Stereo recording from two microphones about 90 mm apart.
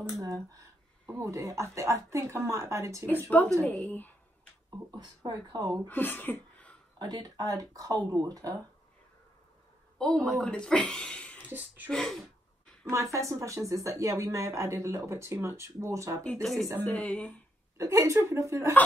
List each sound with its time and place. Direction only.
0.2 s speech: 40° right (ahead or behind)
3.6 s a woman's voice: 15° left (ahead or behind)
4.6 s speech: 45° right (ahead or behind)
5.9 s a sound: 20° left (ahead or behind)
7.0 s speech: 50° right (ahead or behind)
9.9 s a woman's voice: 5° left (ahead or behind)
11.4 s speech: 20° right (ahead or behind)
11.9 s a sound: 5° left (ahead or behind)
12.9 s speech: 35° right (ahead or behind)
16.2 s a woman's voice: 15° left (ahead or behind)
17.7 s speech: 35° right (ahead or behind)